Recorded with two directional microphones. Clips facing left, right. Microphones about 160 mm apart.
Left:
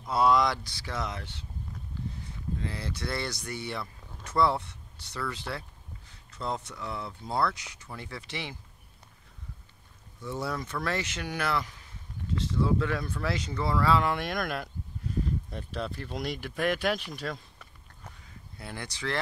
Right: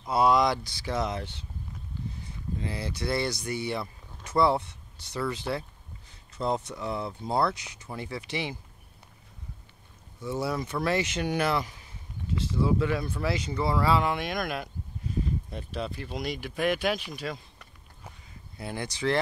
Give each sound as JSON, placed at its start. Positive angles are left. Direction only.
{"t": 0.0, "sound": "speech", "side_deg": -15}
{"t": 2.6, "sound": "speech", "side_deg": -15}
{"t": 10.2, "sound": "speech", "side_deg": -5}
{"t": 12.4, "sound": "speech", "side_deg": -5}
{"t": 18.6, "sound": "speech", "side_deg": -20}